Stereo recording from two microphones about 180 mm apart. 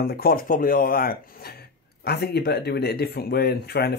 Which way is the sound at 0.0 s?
60° left (ahead or behind).